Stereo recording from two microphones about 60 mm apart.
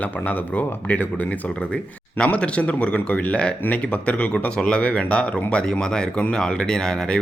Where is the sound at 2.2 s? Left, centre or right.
Centre.